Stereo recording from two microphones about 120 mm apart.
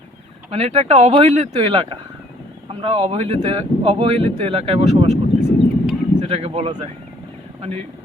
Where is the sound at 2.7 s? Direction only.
50° right (ahead or behind).